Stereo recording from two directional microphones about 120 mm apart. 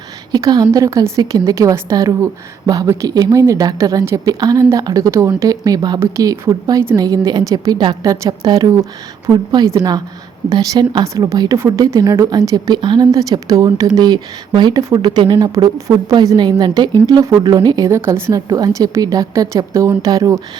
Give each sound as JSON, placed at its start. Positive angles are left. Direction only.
{"t": 0.3, "sound": "a woman's voice", "side_deg": -30}
{"t": 6.0, "sound": "a woman's voice", "side_deg": -25}